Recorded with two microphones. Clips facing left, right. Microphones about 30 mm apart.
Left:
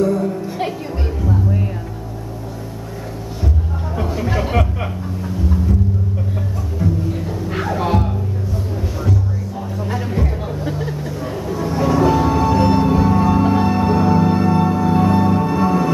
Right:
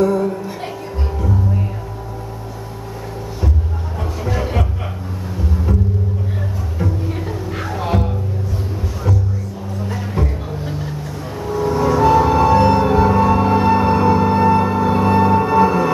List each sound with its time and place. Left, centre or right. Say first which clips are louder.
0.0 s music: right 1 dB; centre
4.0 s music: left 2 dB; centre
6.8 s music: left 2 dB; centre
7.5 s music: left 3 dB; centre
10.1 s music: left 1 dB; centre